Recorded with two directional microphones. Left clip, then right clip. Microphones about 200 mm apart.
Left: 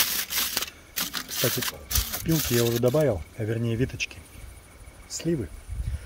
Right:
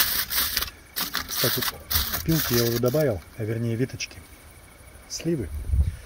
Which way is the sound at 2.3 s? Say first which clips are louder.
Even; 25° left (ahead or behind).